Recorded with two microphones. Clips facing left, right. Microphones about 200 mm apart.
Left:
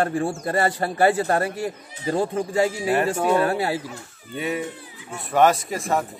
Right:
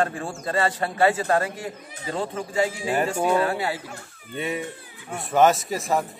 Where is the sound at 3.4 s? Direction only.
40° left (ahead or behind).